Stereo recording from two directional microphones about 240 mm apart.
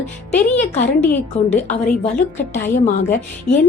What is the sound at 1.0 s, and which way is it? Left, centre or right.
Speech, centre.